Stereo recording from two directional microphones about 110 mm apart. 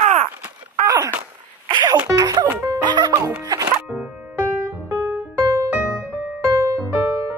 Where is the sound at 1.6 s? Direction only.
40° right (ahead or behind).